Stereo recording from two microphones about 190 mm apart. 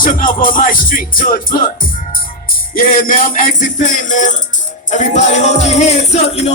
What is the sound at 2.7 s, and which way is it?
Music, 45° left (ahead or behind).